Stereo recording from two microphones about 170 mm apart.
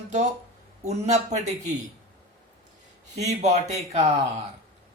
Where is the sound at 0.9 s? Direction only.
40° right (ahead or behind).